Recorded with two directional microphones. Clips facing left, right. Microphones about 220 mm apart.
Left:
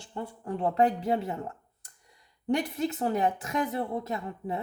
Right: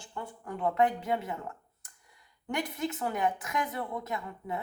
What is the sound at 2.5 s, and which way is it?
Speech, 35° left (ahead or behind).